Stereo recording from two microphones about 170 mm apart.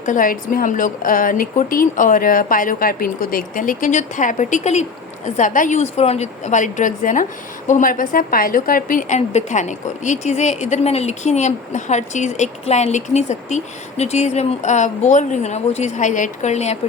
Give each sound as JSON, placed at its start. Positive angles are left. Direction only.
{"t": 0.0, "sound": "a woman's voice", "side_deg": 50}